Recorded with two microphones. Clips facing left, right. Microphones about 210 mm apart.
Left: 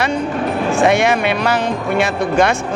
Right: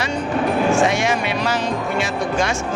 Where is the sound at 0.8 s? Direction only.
60° left (ahead or behind).